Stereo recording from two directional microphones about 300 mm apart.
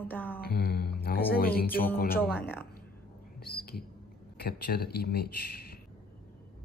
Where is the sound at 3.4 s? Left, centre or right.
Left.